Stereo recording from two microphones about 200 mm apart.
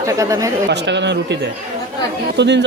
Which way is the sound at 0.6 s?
60° right (ahead or behind).